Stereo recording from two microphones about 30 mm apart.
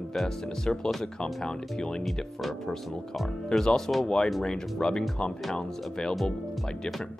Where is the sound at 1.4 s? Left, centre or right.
Left.